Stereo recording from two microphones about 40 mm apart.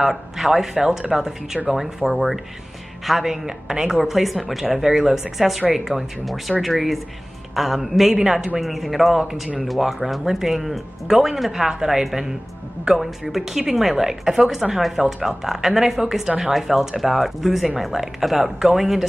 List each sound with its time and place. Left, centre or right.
0.0 s speech: centre
0.7 s speech: centre
3.4 s speech: centre
3.9 s speech: centre
8.1 s speech: centre
8.5 s speech: centre